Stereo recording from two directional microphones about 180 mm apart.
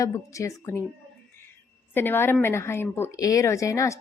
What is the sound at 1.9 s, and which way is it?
A woman's voice, 10° left (ahead or behind).